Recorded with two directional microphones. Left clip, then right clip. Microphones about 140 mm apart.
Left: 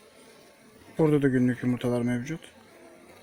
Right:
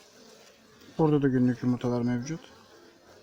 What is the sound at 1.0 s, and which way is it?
Speech, 20° right (ahead or behind).